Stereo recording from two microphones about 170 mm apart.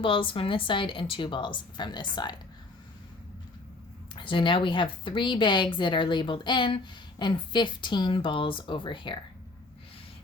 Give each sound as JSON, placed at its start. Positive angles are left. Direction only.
{"t": 0.0, "sound": "speech", "side_deg": 30}
{"t": 4.1, "sound": "speech", "side_deg": 30}